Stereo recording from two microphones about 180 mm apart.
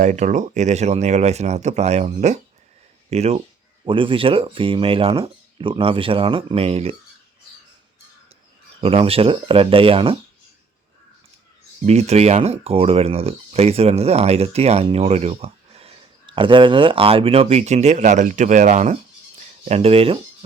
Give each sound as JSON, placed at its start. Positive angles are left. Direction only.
{"t": 0.0, "sound": "speech", "side_deg": -45}
{"t": 8.8, "sound": "speech", "side_deg": -30}
{"t": 11.9, "sound": "speech", "side_deg": -35}